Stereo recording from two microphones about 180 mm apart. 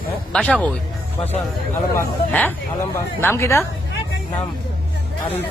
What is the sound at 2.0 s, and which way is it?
Speech, 10° left (ahead or behind).